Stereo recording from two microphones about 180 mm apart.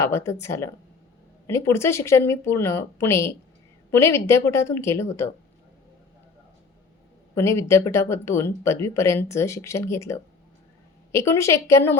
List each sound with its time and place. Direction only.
0.0 s speech: 15° left (ahead or behind)
7.3 s speech: 15° left (ahead or behind)